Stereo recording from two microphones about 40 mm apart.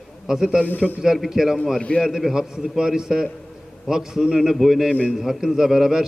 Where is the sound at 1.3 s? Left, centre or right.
Centre.